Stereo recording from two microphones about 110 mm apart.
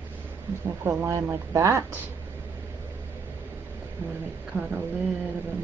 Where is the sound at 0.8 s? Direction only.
20° right (ahead or behind).